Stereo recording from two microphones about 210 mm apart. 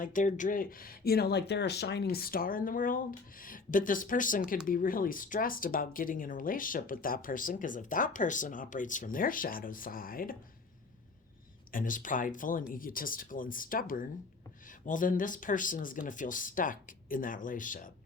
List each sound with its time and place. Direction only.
0.0 s speech: 40° left (ahead or behind)
11.7 s speech: 40° left (ahead or behind)